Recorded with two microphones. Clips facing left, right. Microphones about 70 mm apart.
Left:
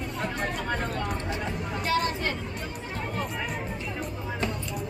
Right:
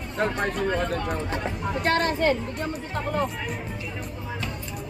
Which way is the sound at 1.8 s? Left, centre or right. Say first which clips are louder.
Right 5 dB; right.